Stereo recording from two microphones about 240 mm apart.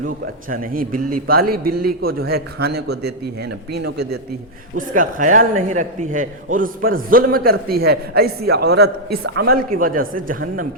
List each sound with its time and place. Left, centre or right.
0.5 s a man's voice: right